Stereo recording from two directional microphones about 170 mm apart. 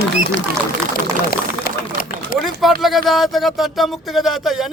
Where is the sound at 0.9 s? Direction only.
60° left (ahead or behind).